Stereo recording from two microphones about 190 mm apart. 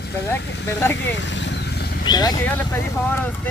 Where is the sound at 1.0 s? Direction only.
70° left (ahead or behind).